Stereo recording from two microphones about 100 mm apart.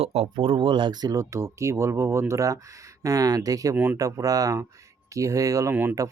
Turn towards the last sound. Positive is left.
turn(degrees=-15)  # may be behind; listen again after turning